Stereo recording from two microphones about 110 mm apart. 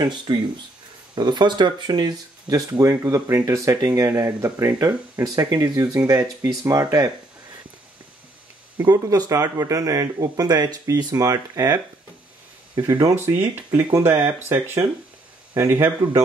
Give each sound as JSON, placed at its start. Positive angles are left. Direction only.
{"t": 0.0, "sound": "speech", "side_deg": -40}
{"t": 8.8, "sound": "speech", "side_deg": -35}
{"t": 13.1, "sound": "speech", "side_deg": -20}